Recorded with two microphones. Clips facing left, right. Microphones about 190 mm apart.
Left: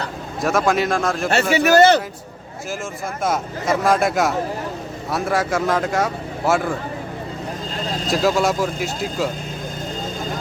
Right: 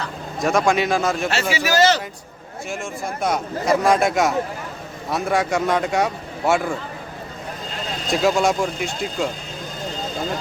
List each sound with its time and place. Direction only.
0.4 s speech: centre (ahead or behind)
1.5 s speech: 60° left (ahead or behind)
3.2 s speech: centre (ahead or behind)
8.0 s speech: centre (ahead or behind)